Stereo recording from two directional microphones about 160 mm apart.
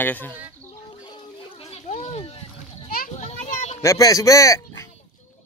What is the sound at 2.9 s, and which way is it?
Children playing, 60° left (ahead or behind).